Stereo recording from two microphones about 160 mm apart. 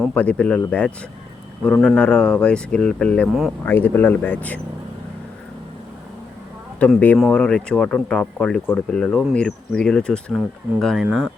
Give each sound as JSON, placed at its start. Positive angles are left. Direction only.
{"t": 0.1, "sound": "speech", "side_deg": 10}
{"t": 6.7, "sound": "speech", "side_deg": 10}